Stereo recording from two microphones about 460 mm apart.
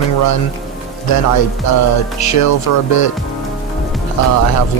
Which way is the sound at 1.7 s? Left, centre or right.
Left.